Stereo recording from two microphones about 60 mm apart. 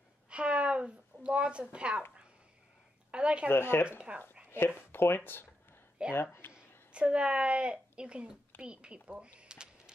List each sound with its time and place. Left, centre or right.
0.3 s a sound: centre
3.1 s a woman's voice: centre
3.4 s speech: left
4.1 s a woman's voice: right
4.5 s speech: left
6.0 s a woman's voice: centre